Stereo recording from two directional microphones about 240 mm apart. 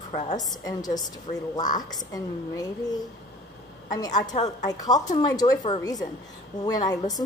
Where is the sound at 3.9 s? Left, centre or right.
Centre.